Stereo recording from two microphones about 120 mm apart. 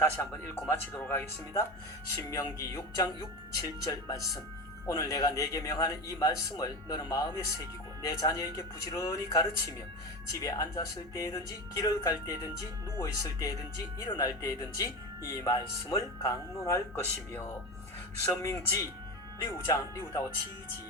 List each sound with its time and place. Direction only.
0.0 s a man's voice: 20° left (ahead or behind)
15.3 s music: 30° left (ahead or behind)
16.0 s a man's voice: 25° left (ahead or behind)